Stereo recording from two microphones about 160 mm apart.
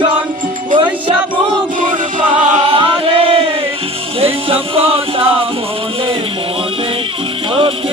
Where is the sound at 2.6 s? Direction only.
30° right (ahead or behind).